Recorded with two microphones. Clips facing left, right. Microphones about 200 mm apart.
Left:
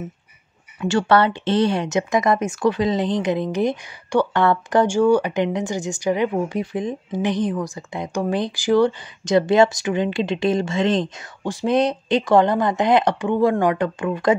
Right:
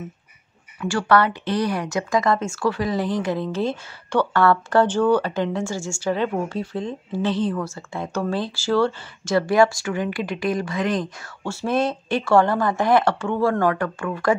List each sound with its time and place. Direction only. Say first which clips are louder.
0.7 s speech: left 2 dB; 20° left (ahead or behind)